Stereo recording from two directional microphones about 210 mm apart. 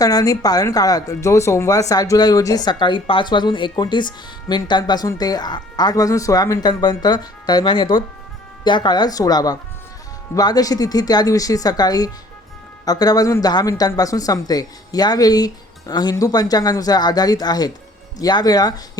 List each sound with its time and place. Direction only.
0.0 s speech: 15° left (ahead or behind)